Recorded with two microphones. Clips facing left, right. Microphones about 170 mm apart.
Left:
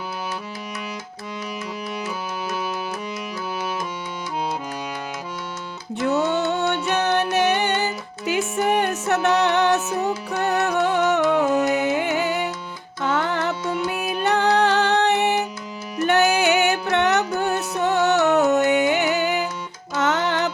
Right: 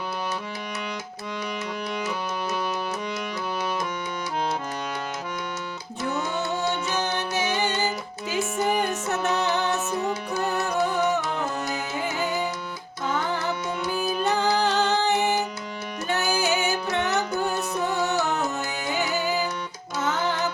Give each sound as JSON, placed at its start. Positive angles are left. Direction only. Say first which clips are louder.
{"t": 6.0, "sound": "music", "louder": "left 7 dB", "side_deg": 70}